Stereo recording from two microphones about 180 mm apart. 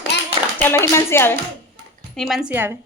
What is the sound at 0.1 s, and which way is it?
Clapping, 70° left (ahead or behind).